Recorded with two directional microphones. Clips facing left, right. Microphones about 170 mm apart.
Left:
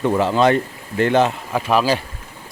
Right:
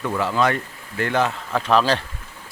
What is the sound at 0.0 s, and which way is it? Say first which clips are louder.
Speech: left 5 dB; 25° left (ahead or behind).